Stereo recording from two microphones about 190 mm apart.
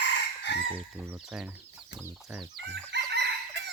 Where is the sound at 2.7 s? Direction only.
65° right (ahead or behind).